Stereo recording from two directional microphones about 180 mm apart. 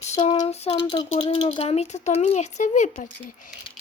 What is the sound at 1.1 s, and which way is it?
Speech, 35° left (ahead or behind).